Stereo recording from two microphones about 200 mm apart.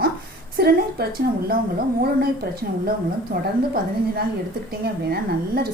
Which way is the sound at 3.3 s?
50° right (ahead or behind).